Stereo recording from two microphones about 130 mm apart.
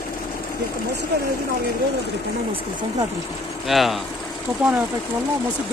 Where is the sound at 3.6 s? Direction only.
Centre (ahead or behind).